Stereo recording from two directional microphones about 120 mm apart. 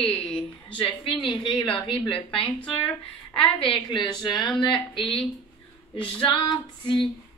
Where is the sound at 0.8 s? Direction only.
45° left (ahead or behind).